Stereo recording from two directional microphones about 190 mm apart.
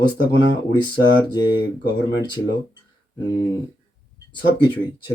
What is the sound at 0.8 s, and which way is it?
Speech, 20° left (ahead or behind).